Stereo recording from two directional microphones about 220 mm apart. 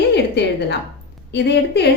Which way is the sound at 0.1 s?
50° left (ahead or behind).